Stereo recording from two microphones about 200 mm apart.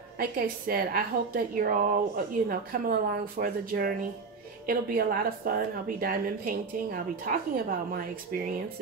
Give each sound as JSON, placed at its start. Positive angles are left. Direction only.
{"t": 0.2, "sound": "a woman's voice", "side_deg": -50}